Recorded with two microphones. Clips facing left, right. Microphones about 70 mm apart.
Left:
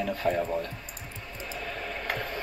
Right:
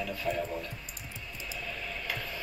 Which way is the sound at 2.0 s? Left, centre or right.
Left.